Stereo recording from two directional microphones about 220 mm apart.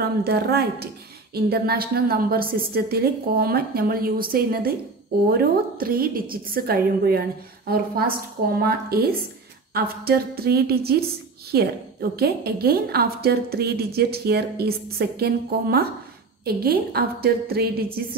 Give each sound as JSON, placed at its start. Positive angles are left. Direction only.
{"t": 0.2, "sound": "a woman's voice", "side_deg": -45}